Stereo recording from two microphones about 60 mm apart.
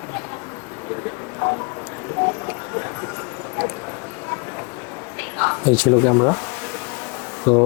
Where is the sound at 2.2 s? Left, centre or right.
Left.